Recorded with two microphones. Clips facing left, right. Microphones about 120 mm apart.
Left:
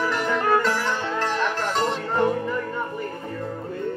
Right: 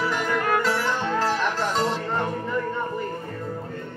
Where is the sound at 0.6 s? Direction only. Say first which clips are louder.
Even; 5° right (ahead or behind).